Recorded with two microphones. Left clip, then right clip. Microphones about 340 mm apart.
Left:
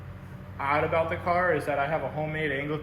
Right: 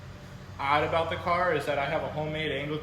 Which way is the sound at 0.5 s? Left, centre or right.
Centre.